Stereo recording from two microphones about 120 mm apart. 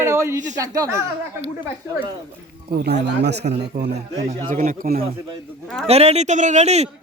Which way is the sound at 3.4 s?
90° right.